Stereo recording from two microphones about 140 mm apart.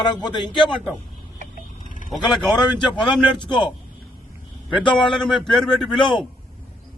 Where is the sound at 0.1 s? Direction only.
30° left (ahead or behind).